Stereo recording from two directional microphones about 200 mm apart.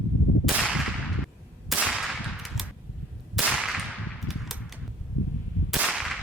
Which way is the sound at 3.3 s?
5° right (ahead or behind).